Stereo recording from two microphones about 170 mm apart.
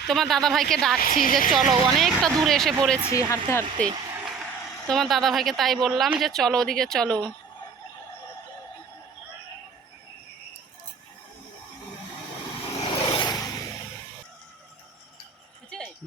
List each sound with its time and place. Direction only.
0.1 s speech: centre (ahead or behind)
0.9 s a woman's voice: 55° left (ahead or behind)
1.5 s speech: centre (ahead or behind)
3.1 s speech: 15° left (ahead or behind)
3.8 s a sound: 20° right (ahead or behind)
4.3 s speech: centre (ahead or behind)
12.8 s vehicle: 30° left (ahead or behind)